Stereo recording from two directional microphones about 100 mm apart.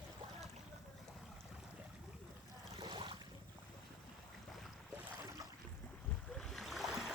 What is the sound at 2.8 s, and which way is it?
Boat, 55° right (ahead or behind).